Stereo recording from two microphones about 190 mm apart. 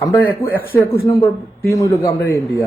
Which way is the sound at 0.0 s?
15° left (ahead or behind).